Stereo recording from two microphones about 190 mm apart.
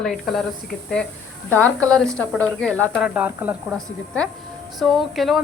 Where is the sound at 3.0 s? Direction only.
10° right (ahead or behind).